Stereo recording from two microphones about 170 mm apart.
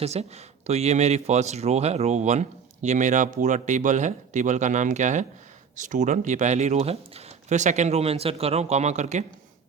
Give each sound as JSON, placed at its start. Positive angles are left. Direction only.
{"t": 0.0, "sound": "speech", "side_deg": -40}